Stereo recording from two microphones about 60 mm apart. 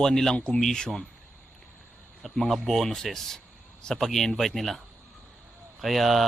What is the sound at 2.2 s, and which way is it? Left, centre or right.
Speech, centre.